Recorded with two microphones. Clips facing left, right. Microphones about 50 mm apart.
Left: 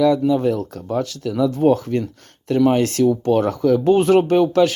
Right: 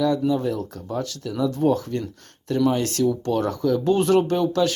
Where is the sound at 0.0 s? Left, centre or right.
Left.